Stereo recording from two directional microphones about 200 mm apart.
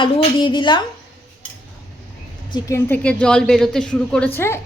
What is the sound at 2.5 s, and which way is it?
A woman's voice, 15° left (ahead or behind).